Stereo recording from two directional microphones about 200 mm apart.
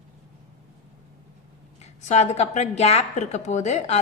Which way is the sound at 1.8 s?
35° left (ahead or behind).